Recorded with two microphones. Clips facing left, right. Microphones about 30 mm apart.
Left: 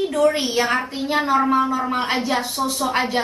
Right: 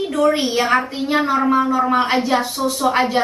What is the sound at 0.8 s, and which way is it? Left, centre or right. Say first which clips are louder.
A woman's voice: right 2 dB; centre.